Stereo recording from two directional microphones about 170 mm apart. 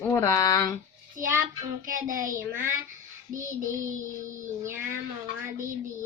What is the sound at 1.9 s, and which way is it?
Speech, 50° right (ahead or behind).